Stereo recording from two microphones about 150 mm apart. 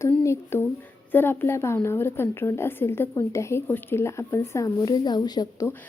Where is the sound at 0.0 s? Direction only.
20° left (ahead or behind).